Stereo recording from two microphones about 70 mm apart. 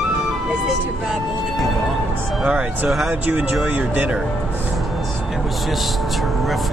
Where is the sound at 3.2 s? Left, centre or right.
Right.